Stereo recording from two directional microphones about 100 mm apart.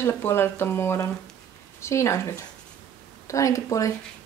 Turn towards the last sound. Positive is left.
turn(degrees=30)  # may be behind; listen again after turning